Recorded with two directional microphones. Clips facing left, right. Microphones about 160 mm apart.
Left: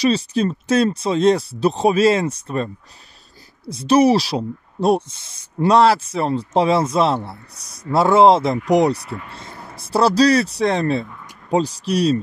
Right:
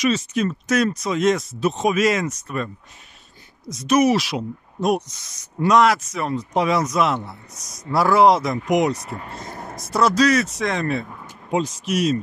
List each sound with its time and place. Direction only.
0.0 s a man's voice: 35° left (ahead or behind)
9.5 s a sound: 50° right (ahead or behind)
9.8 s speech: 30° left (ahead or behind)